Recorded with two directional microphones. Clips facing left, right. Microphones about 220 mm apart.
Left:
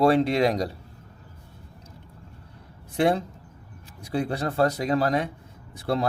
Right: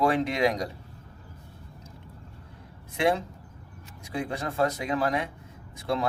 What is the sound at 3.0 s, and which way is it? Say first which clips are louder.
A man's voice: left 3 dB; 35° left (ahead or behind).